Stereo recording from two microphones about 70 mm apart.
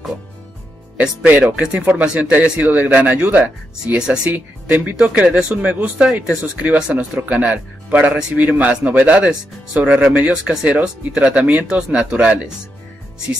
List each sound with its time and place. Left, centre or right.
1.5 s speech: centre
1.9 s speech: right
4.2 s speech: right